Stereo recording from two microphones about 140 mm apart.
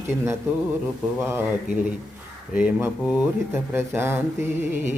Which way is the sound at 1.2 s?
15° right (ahead or behind).